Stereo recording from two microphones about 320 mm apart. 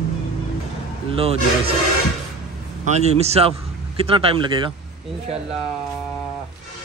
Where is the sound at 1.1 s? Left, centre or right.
Centre.